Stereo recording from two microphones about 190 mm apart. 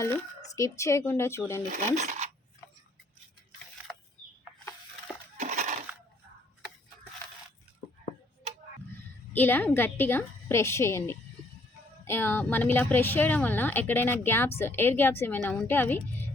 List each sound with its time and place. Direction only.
0.0 s speech: 15° left (ahead or behind)
2.0 s speech: 40° right (ahead or behind)
5.4 s crushing: 40° right (ahead or behind)
9.3 s speech: 10° left (ahead or behind)